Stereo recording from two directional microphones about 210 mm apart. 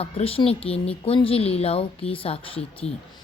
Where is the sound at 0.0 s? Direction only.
30° left (ahead or behind).